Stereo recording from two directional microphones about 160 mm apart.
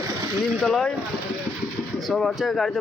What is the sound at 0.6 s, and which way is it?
Speech, 5° left (ahead or behind).